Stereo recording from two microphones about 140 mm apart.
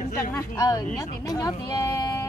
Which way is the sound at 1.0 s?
25° left (ahead or behind).